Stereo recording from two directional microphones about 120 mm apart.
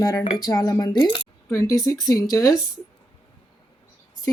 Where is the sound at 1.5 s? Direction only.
25° left (ahead or behind).